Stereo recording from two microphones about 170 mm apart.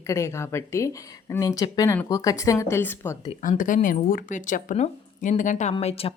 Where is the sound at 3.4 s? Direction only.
50° left (ahead or behind).